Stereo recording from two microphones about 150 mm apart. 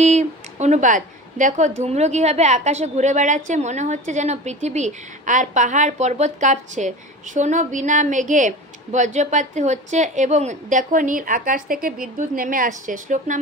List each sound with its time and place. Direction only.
0.0 s a woman's voice: 50° right (ahead or behind)